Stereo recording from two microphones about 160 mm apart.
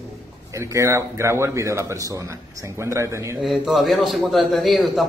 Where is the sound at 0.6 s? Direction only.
15° right (ahead or behind).